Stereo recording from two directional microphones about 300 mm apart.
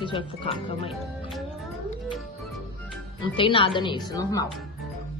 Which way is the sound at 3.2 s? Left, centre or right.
Centre.